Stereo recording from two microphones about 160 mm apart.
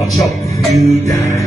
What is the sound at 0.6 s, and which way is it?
Music, centre (ahead or behind).